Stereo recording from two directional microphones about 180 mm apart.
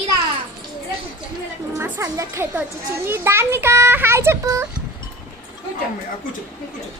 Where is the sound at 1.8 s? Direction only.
15° right (ahead or behind).